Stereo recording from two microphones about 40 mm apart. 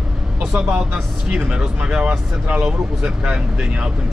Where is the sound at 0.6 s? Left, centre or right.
Right.